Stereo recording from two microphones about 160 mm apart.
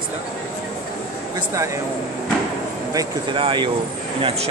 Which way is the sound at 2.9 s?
30° right (ahead or behind).